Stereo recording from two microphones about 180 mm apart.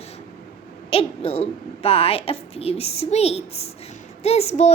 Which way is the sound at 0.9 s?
35° left (ahead or behind).